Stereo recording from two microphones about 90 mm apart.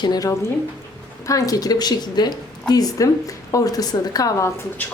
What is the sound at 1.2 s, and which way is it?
A woman's voice, 40° left (ahead or behind).